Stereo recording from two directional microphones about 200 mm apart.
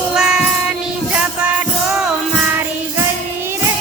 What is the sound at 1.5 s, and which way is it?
Music, 5° right (ahead or behind).